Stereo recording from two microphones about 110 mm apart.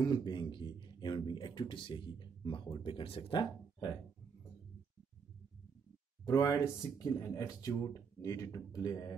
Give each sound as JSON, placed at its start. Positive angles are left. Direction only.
{"t": 0.0, "sound": "speech", "side_deg": 40}
{"t": 6.2, "sound": "speech", "side_deg": 40}